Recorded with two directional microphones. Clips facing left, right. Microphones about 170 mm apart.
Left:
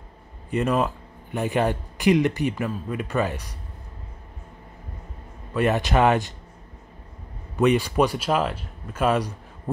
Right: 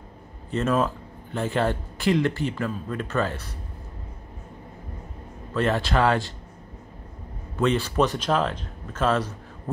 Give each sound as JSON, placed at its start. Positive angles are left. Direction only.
{"t": 0.5, "sound": "speech", "side_deg": 15}
{"t": 5.5, "sound": "speech", "side_deg": 15}
{"t": 7.5, "sound": "speech", "side_deg": 15}